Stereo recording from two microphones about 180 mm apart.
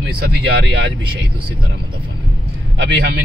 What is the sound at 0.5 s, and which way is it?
Speech, 70° right (ahead or behind).